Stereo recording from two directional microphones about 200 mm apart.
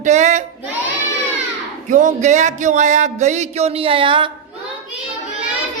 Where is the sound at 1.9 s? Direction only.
35° right (ahead or behind).